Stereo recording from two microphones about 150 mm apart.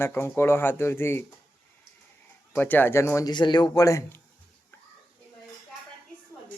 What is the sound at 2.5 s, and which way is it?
Speech, 15° left (ahead or behind).